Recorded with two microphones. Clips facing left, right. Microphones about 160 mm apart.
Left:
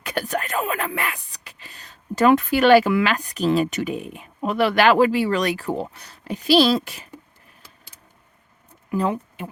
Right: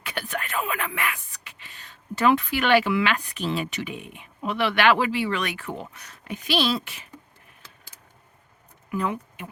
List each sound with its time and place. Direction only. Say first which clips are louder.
0.0 s speech: left 6 dB; 40° left (ahead or behind)
8.9 s speech: left 5 dB; 30° left (ahead or behind)